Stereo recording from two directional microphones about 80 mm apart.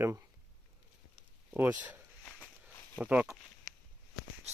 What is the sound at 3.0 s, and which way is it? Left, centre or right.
Speech, centre.